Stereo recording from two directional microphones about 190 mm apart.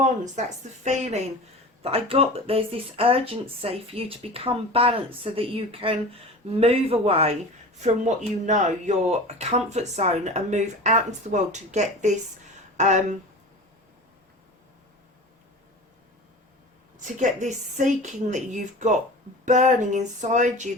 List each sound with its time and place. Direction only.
0.9 s speech: 35° right (ahead or behind)
17.2 s speech: 40° right (ahead or behind)